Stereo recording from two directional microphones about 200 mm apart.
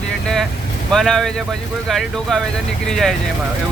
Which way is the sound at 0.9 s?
Centre (ahead or behind).